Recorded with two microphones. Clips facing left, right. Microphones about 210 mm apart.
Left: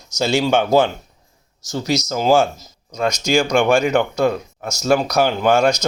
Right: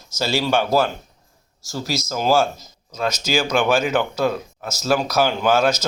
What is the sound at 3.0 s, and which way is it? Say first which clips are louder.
Speech: left 4 dB; 5° right (ahead or behind).